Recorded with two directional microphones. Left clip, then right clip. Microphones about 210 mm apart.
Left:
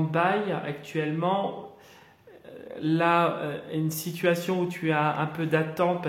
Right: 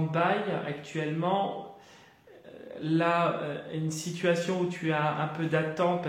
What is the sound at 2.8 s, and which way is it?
A man's voice, 35° left (ahead or behind).